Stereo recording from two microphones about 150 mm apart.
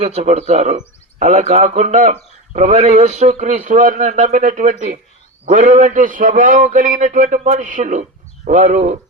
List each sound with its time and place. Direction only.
0.0 s a man's voice: 45° right (ahead or behind)